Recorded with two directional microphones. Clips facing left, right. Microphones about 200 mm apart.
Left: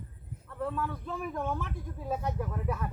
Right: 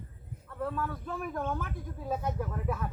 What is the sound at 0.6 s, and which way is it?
Speech, centre (ahead or behind).